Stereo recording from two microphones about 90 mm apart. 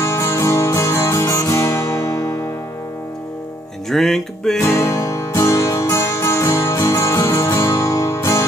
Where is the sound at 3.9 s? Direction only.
5° left (ahead or behind).